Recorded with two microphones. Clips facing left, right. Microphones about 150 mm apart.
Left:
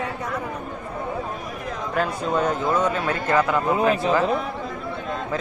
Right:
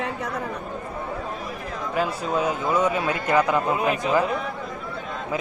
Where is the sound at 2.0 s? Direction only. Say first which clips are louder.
Left 1 dB; 5° right (ahead or behind).